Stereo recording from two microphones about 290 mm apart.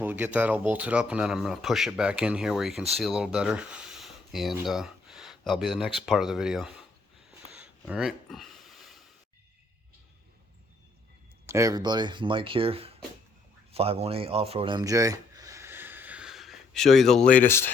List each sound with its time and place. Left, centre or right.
0.0 s speech: centre
7.5 s a sound: centre
11.4 s speech: centre